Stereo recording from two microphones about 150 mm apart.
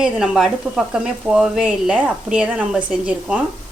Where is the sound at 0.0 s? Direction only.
5° right (ahead or behind).